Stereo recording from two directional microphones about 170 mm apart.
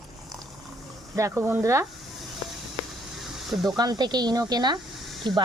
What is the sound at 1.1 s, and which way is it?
Speech, 20° right (ahead or behind).